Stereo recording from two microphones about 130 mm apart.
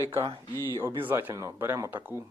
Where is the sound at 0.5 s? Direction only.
25° left (ahead or behind).